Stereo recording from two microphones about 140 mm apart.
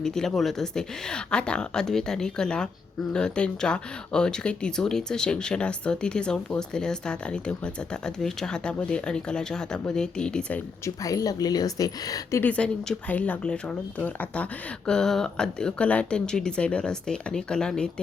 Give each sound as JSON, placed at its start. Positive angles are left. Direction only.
{"t": 0.0, "sound": "speech", "side_deg": 5}
{"t": 10.8, "sound": "speech", "side_deg": 25}
{"t": 12.4, "sound": "speech", "side_deg": 10}